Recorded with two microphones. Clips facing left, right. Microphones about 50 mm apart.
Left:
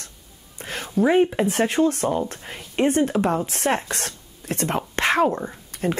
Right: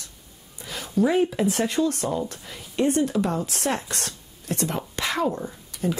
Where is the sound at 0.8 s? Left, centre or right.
Left.